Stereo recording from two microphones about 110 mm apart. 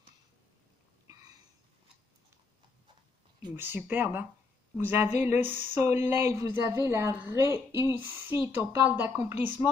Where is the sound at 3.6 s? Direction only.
20° right (ahead or behind).